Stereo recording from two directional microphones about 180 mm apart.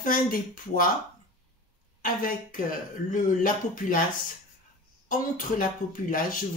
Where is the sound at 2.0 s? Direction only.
50° left (ahead or behind).